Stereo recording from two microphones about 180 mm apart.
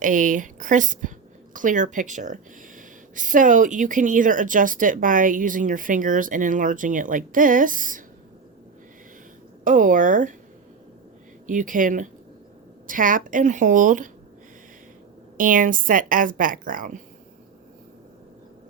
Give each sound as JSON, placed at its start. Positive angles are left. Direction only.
{"t": 0.0, "sound": "speech", "side_deg": -45}
{"t": 9.6, "sound": "speech", "side_deg": -45}
{"t": 11.4, "sound": "speech", "side_deg": -45}
{"t": 15.4, "sound": "speech", "side_deg": -50}